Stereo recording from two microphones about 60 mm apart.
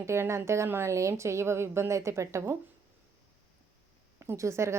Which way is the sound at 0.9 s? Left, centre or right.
Right.